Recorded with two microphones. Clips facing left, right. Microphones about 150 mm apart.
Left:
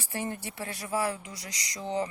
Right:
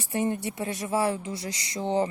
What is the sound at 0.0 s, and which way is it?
Speech, 20° right (ahead or behind).